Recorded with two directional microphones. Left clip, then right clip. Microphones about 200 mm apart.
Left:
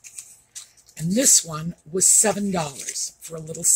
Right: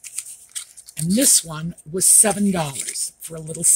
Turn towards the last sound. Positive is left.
turn(degrees=-45)  # may be behind; listen again after turning